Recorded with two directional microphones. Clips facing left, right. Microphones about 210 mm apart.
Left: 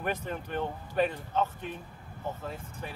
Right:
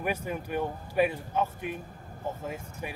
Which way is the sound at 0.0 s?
10° right (ahead or behind).